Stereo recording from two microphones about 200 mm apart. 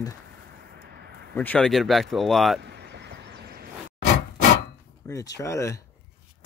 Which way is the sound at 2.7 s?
55° right (ahead or behind).